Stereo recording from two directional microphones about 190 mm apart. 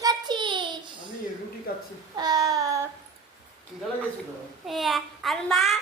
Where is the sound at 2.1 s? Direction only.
20° right (ahead or behind).